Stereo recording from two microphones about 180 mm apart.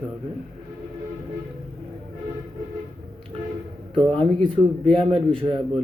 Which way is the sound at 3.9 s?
30° right (ahead or behind).